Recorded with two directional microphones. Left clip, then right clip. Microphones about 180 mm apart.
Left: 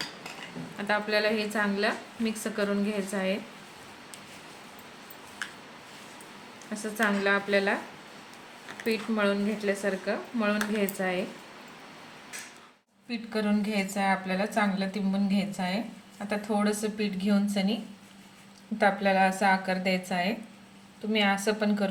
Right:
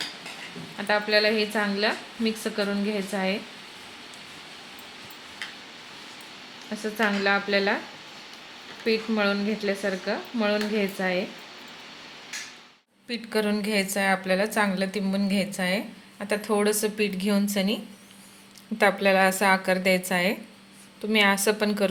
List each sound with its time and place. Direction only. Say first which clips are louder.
0.8 s a woman's voice: right 4 dB; 45° right (ahead or behind)
6.8 s a woman's voice: right 2 dB; 40° right (ahead or behind)
8.8 s a woman's voice: right 3 dB; 40° right (ahead or behind)
13.1 s a woman's voice: right 4 dB; 35° right (ahead or behind)
18.8 s a woman's voice: right 3 dB; 30° right (ahead or behind)